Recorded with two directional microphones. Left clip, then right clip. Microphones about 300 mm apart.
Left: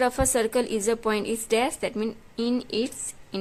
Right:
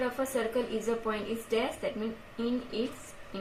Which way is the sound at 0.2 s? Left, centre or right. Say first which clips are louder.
Left 7 dB; left.